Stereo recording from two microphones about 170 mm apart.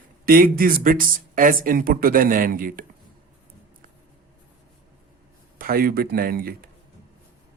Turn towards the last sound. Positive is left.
turn(degrees=-60)  # may be behind; listen again after turning